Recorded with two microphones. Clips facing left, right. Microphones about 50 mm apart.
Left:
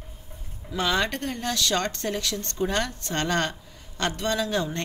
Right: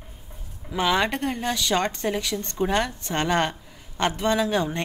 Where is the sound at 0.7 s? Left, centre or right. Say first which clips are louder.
Right 3 dB; centre.